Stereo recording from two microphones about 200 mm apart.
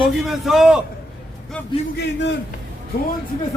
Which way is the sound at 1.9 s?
60° left (ahead or behind).